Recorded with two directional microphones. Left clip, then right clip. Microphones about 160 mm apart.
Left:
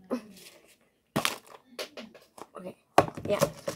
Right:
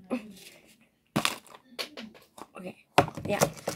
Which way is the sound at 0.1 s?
Centre (ahead or behind).